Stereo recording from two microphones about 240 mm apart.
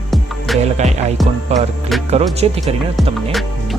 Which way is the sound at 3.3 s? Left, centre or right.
Centre.